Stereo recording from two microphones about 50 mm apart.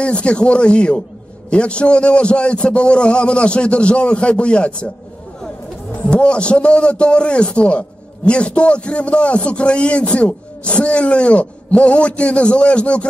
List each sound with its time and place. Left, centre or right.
0.0 s a man's voice: left
6.0 s a man's voice: left